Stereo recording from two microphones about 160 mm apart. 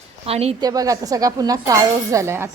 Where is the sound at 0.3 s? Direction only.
40° right (ahead or behind).